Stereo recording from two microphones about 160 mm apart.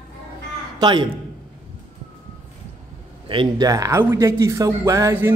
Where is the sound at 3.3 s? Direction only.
30° right (ahead or behind).